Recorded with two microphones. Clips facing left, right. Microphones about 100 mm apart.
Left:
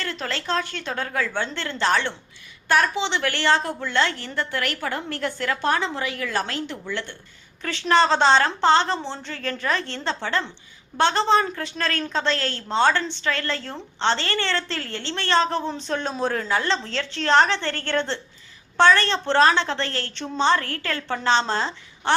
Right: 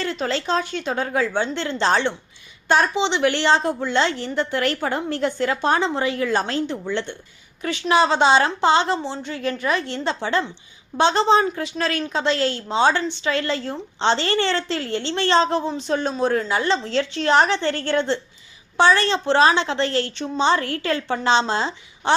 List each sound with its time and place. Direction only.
0.0 s a woman's voice: 20° right (ahead or behind)
7.6 s a woman's voice: 10° right (ahead or behind)
15.7 s a woman's voice: 5° right (ahead or behind)